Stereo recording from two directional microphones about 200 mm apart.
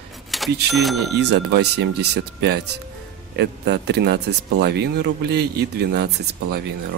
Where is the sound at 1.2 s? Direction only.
55° right (ahead or behind).